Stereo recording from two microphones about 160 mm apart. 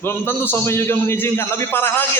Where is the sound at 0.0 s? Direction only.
15° left (ahead or behind).